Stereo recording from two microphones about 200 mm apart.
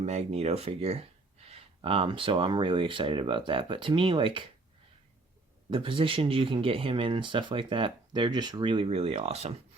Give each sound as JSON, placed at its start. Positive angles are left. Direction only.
{"t": 0.0, "sound": "speech", "side_deg": -35}
{"t": 5.7, "sound": "speech", "side_deg": -25}